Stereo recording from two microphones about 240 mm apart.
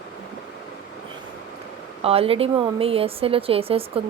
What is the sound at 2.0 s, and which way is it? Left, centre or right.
A woman's voice, right.